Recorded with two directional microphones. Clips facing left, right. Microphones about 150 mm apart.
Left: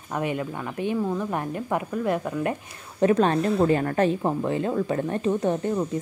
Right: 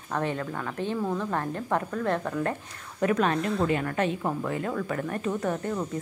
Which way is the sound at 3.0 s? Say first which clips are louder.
Left 5 dB; 30° left (ahead or behind).